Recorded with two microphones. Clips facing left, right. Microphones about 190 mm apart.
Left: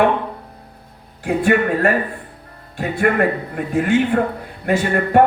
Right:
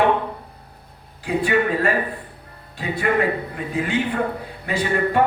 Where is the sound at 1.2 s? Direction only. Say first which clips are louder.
Left 3 dB; 50° left (ahead or behind).